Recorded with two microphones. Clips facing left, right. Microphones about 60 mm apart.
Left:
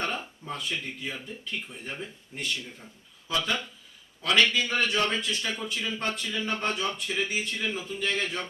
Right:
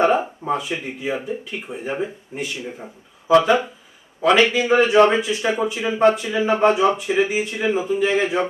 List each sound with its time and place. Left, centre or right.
0.0 s a man's voice: centre